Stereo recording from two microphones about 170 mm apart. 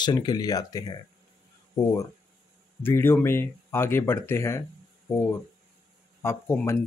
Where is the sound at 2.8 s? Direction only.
15° left (ahead or behind).